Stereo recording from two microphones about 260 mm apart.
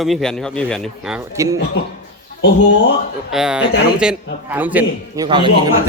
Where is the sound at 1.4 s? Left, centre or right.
Centre.